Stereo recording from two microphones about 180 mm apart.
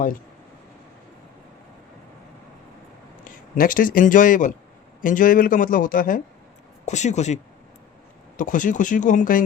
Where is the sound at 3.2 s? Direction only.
50° left (ahead or behind).